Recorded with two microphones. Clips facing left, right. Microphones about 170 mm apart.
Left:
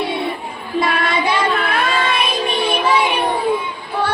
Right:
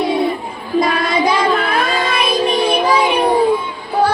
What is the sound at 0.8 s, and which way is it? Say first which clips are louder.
Child singing: right 3 dB; 40° right (ahead or behind).